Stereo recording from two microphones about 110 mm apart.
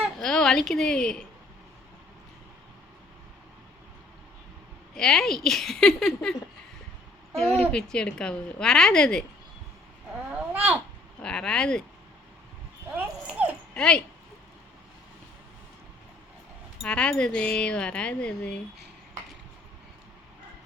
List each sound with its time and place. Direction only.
0.0 s a sound: 5° left (ahead or behind)
4.9 s speech: 5° left (ahead or behind)
7.6 s speech: 10° left (ahead or behind)
10.1 s speech: 15° right (ahead or behind)
11.2 s speech: 5° left (ahead or behind)
12.9 s dog: 15° right (ahead or behind)
13.7 s speech: 5° left (ahead or behind)
16.8 s speech: 5° left (ahead or behind)